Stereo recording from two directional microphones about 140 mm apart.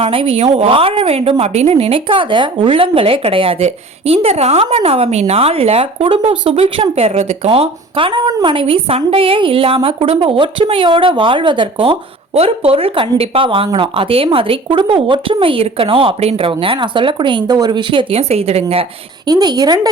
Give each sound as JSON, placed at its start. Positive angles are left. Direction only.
{"t": 0.0, "sound": "a woman's voice", "side_deg": -40}
{"t": 19.3, "sound": "a woman's voice", "side_deg": -30}